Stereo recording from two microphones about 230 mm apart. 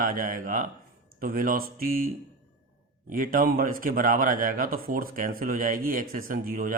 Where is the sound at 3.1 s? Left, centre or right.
Right.